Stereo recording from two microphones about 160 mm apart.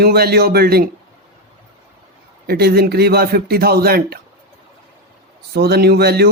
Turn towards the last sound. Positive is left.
turn(degrees=-85)